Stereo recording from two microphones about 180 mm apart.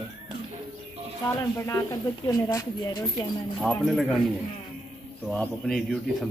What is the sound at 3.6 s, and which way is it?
Speech, centre (ahead or behind).